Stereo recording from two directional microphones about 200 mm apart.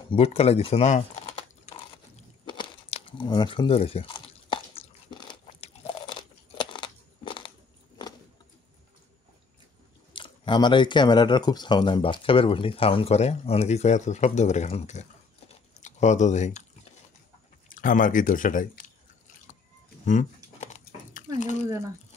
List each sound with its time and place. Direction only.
0.1 s speech: 30° left (ahead or behind)
2.4 s crumpling: 25° left (ahead or behind)
6.6 s crunch: 25° left (ahead or behind)
10.1 s speech: 25° left (ahead or behind)
17.6 s speech: 40° left (ahead or behind)
20.6 s dog: 35° left (ahead or behind)